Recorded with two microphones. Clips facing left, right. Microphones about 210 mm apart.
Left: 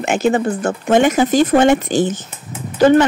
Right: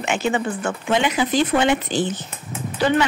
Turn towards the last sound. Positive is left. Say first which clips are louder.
# left 8 dB
turn(degrees=45)  # may be behind; listen again after turning